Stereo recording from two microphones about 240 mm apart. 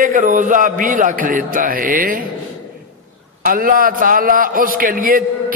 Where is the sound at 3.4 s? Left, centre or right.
Right.